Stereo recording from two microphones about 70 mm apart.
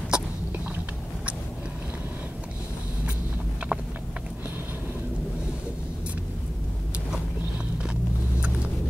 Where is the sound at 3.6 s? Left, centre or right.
Centre.